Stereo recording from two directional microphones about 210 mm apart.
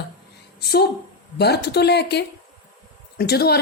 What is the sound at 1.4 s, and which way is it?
A woman's voice, 50° left (ahead or behind).